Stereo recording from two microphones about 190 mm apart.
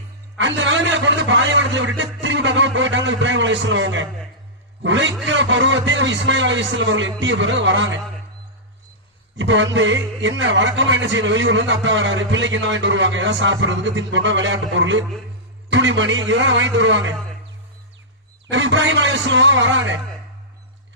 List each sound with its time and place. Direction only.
0.3 s a man's voice: 75° right (ahead or behind)
9.4 s a man's voice: 75° right (ahead or behind)
18.5 s a man's voice: 75° right (ahead or behind)